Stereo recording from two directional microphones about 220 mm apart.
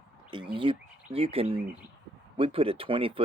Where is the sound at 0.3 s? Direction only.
20° right (ahead or behind).